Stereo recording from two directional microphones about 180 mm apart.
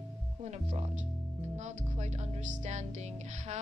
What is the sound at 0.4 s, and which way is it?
Music, 35° right (ahead or behind).